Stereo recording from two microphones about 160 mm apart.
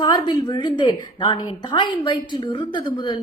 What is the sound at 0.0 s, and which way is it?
A woman's voice, 25° left (ahead or behind).